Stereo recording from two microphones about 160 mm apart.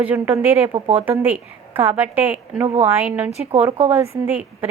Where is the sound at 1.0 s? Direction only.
10° right (ahead or behind).